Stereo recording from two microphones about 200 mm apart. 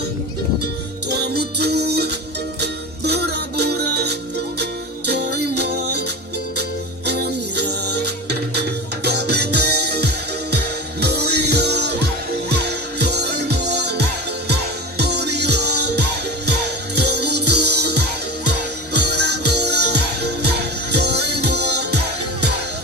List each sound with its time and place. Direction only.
1.1 s music: 55° right (ahead or behind)